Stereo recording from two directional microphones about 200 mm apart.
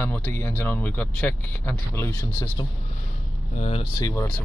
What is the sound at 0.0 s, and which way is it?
Speech, 10° left (ahead or behind).